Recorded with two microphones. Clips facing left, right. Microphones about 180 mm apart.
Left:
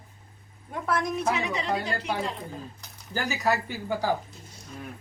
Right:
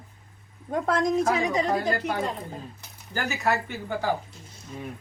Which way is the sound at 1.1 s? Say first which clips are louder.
Right 5 dB; 40° right (ahead or behind).